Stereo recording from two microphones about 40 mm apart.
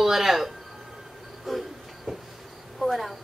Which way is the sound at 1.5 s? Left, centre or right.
Centre.